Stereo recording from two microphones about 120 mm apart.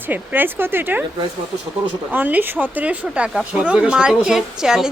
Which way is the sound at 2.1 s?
15° right (ahead or behind).